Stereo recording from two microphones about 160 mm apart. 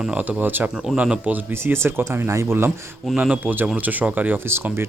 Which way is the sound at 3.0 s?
5° right (ahead or behind).